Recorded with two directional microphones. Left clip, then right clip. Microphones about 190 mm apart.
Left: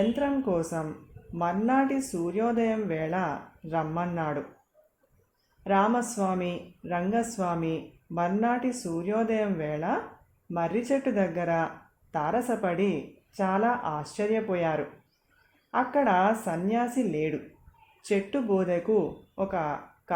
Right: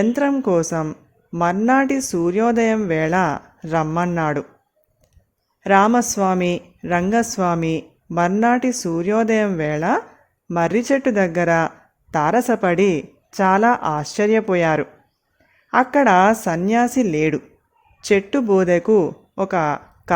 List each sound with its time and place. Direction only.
0.1 s a woman's voice: 55° right (ahead or behind)
5.6 s a woman's voice: 60° right (ahead or behind)